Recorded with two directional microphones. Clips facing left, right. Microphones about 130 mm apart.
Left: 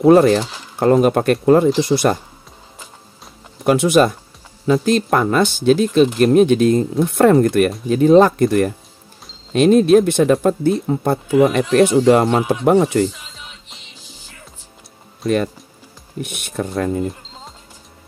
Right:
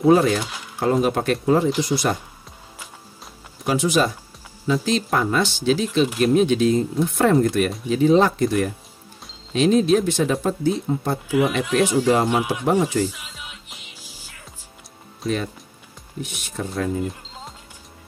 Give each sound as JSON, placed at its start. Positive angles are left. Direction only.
{"t": 0.0, "sound": "speech", "side_deg": 60}
{"t": 3.6, "sound": "speech", "side_deg": 60}
{"t": 13.1, "sound": "music", "side_deg": -5}
{"t": 15.2, "sound": "speech", "side_deg": 60}